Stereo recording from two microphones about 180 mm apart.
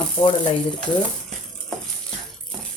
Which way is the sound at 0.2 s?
25° left (ahead or behind).